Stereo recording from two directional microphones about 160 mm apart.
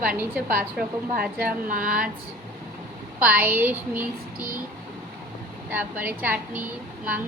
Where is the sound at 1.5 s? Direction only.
60° right (ahead or behind).